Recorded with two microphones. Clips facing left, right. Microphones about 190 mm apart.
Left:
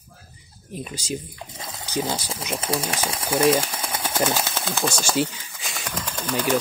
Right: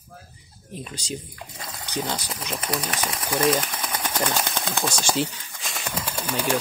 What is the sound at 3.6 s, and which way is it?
Sewing machine, 25° left (ahead or behind).